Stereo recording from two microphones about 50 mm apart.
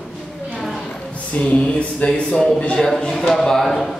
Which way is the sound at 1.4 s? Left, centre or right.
Left.